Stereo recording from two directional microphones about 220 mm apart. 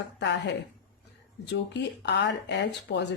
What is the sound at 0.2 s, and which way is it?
A woman's voice, 55° left (ahead or behind).